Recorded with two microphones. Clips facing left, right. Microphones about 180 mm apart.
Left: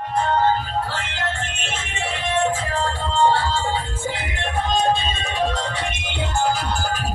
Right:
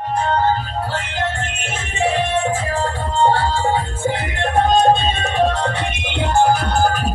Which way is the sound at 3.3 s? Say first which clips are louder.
Right 4 dB; 50° right (ahead or behind).